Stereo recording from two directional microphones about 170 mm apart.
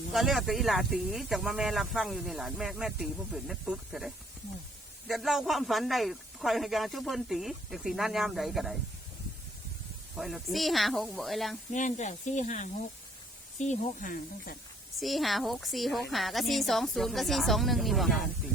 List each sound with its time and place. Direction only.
0.1 s speech: centre (ahead or behind)
10.2 s speech: centre (ahead or behind)
11.7 s speech: 45° left (ahead or behind)
14.9 s speech: centre (ahead or behind)